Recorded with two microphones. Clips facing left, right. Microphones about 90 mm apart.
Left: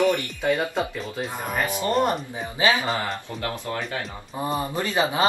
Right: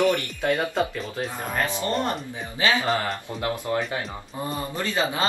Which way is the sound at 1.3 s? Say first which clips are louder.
Left 1 dB; 15° left (ahead or behind).